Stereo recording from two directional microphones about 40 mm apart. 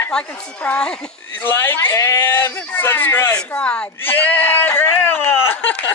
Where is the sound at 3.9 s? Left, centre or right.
Left.